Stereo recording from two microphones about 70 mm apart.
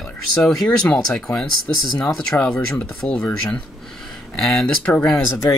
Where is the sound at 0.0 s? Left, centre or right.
Centre.